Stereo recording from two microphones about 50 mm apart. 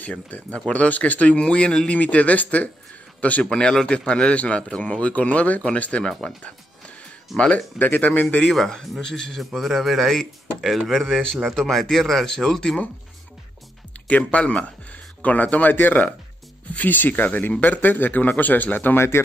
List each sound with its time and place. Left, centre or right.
0.0 s speech: left
3.4 s speech: centre
6.4 s music: left
7.3 s speech: left
7.8 s speech: left
8.5 s speech: centre
9.4 s speech: centre
14.0 s speech: left
18.9 s speech: left